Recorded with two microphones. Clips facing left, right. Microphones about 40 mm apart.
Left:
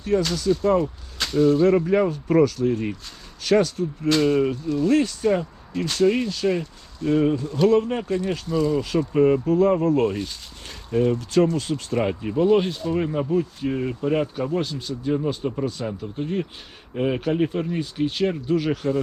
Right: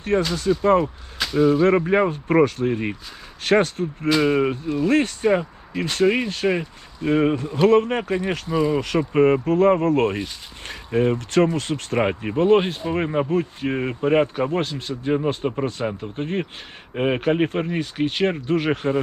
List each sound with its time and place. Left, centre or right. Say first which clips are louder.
0.1 s speech: right 1 dB; right
1.2 s speech: right 1 dB; centre
1.6 s speech: right 1 dB; right
4.1 s speech: right 1 dB; centre
4.4 s speech: even; right
5.3 s speech: right 2 dB; right
6.2 s speech: right 1 dB; right
6.5 s speech: right 1 dB; right
7.7 s speech: right 3 dB; right
8.4 s speech: right 1 dB; centre
9.0 s speech: right 1 dB; right
10.7 s speech: right 1 dB; right
11.2 s speech: right 1 dB; right
11.9 s speech: right 2 dB; right